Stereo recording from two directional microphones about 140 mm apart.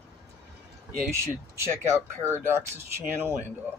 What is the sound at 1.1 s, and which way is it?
Speech, 20° right (ahead or behind).